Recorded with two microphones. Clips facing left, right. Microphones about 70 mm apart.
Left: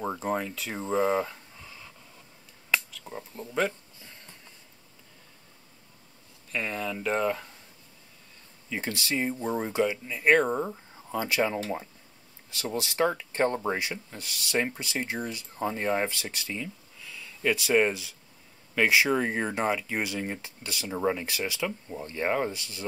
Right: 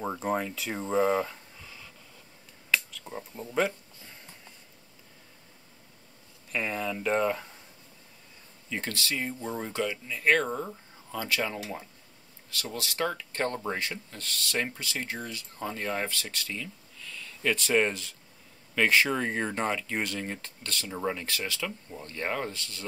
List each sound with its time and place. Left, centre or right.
0.0 s speech: centre
2.9 s speech: centre
6.5 s speech: centre
8.6 s speech: centre
8.9 s speech: left